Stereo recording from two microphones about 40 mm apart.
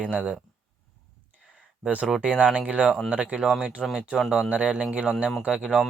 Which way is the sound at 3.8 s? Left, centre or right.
Centre.